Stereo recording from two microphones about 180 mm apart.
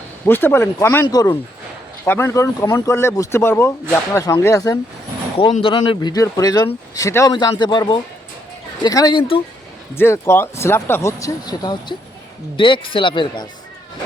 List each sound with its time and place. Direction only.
0.3 s speech: 10° left (ahead or behind); by 9.4 s 25° left (ahead or behind)
10.0 s speech: 15° left (ahead or behind)